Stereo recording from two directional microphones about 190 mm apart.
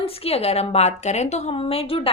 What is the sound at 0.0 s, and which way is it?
A woman's voice, 30° left (ahead or behind).